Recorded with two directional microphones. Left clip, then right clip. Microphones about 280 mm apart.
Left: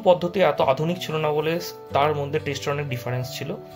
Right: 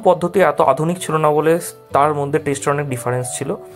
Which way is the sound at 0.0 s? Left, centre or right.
Centre.